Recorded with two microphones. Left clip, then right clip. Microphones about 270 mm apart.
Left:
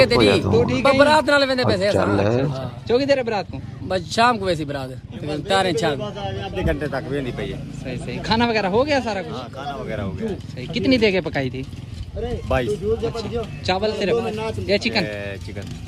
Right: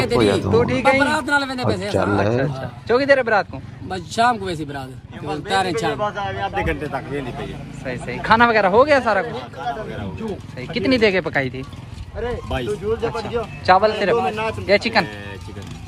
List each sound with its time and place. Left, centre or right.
0.0 s a man's voice: centre
14.2 s a man's voice: right
14.7 s a man's voice: centre